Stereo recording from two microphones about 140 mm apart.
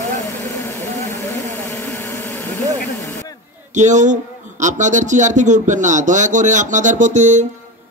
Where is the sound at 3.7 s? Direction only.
60° right (ahead or behind).